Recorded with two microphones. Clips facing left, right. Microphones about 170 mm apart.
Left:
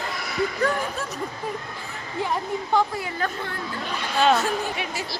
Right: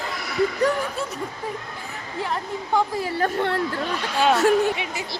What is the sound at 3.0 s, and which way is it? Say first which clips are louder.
Speech: right 4 dB; 35° right (ahead or behind).